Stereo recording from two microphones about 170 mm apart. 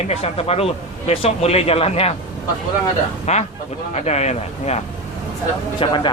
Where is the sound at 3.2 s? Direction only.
40° left (ahead or behind).